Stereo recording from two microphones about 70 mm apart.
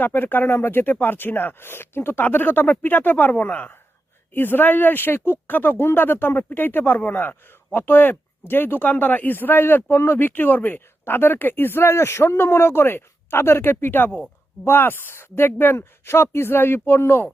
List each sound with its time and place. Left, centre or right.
0.0 s speech: left